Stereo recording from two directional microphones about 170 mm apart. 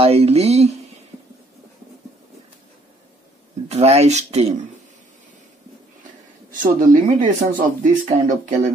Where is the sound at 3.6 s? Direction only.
40° right (ahead or behind).